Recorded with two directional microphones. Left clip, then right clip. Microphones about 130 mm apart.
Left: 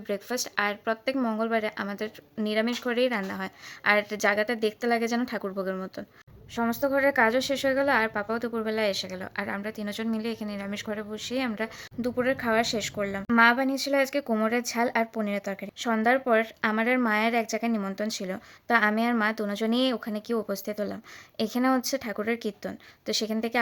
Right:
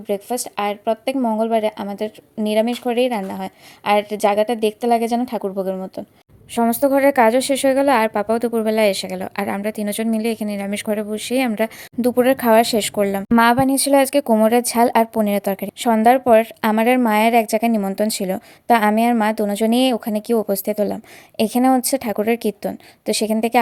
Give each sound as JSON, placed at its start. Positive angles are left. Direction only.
{"t": 0.1, "sound": "a woman's voice", "side_deg": -30}
{"t": 6.5, "sound": "a woman's voice", "side_deg": -70}